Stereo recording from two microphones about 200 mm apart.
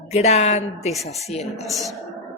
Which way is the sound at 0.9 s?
Centre (ahead or behind).